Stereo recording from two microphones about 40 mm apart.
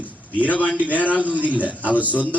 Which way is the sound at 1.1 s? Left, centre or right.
Right.